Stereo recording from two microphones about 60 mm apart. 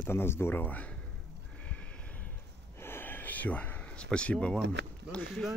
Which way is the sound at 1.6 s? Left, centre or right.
Left.